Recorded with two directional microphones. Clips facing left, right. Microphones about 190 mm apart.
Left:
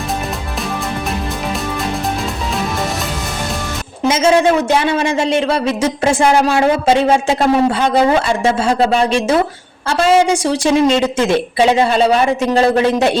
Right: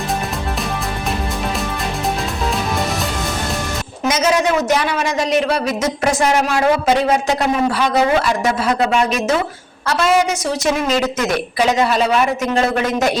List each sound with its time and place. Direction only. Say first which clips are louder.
4.0 s speech: left 5 dB; 30° left (ahead or behind)